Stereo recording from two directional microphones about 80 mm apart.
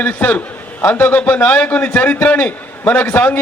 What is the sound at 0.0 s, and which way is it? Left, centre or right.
A man's voice, centre.